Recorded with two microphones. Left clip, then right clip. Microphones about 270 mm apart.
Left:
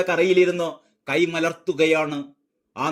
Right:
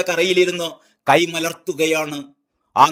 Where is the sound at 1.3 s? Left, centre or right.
Centre.